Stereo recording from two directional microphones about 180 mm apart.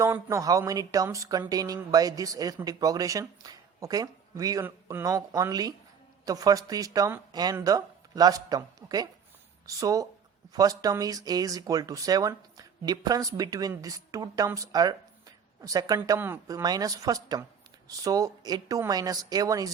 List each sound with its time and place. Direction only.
0.0 s speech: 15° right (ahead or behind)